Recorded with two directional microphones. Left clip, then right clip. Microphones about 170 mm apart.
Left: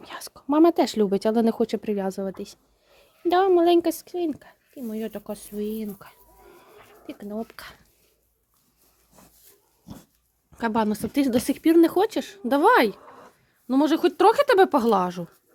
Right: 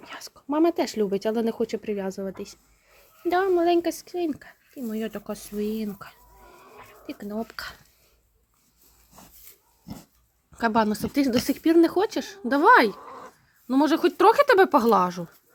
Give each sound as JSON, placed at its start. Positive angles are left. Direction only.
{"t": 0.0, "sound": "speech", "side_deg": 20}
{"t": 10.5, "sound": "speech", "side_deg": 10}